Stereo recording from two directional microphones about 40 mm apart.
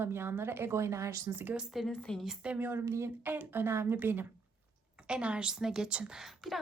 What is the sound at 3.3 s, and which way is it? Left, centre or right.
Speech, right.